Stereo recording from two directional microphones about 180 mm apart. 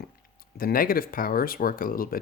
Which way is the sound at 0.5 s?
55° left (ahead or behind).